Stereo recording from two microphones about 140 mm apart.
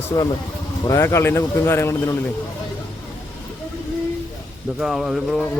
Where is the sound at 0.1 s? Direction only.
15° left (ahead or behind).